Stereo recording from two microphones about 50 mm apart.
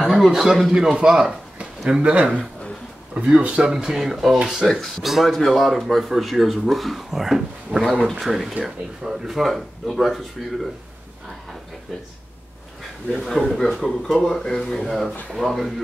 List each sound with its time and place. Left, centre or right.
0.0 s speech: centre
3.4 s speech: right
3.7 s speech: centre
13.1 s speech: centre